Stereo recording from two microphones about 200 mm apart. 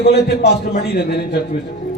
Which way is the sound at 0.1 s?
55° left (ahead or behind).